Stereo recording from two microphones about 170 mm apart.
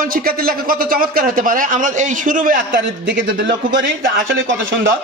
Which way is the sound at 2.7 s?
90° right.